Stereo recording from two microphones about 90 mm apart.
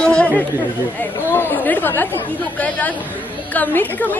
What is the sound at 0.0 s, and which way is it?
Chatter, 15° left (ahead or behind).